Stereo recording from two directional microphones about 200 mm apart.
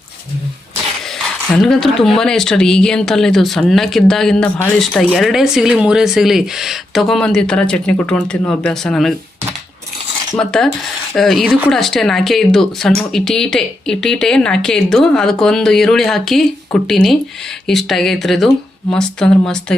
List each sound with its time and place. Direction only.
1.5 s speech: centre (ahead or behind)
10.3 s speech: centre (ahead or behind)